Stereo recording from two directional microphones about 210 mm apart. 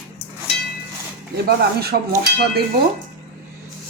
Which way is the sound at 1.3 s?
50° right (ahead or behind).